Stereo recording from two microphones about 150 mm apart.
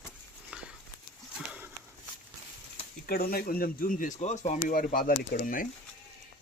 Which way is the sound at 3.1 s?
85° left.